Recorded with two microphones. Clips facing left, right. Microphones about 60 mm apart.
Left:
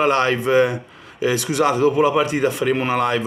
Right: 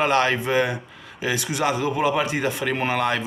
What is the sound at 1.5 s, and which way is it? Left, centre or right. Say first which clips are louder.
Speech: left 7 dB; left.